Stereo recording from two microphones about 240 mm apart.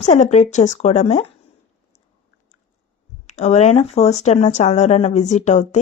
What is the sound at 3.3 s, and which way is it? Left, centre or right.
Speech, left.